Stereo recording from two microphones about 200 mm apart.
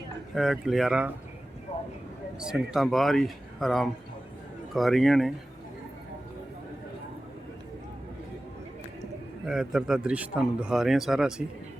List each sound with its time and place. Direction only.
0.3 s speech: centre (ahead or behind)
2.4 s speech: 5° right (ahead or behind)
9.5 s speech: 5° right (ahead or behind)